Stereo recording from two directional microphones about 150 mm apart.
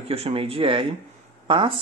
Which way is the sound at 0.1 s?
40° right (ahead or behind).